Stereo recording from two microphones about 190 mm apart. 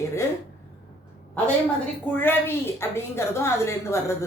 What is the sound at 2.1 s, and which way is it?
A woman's voice, 10° left (ahead or behind).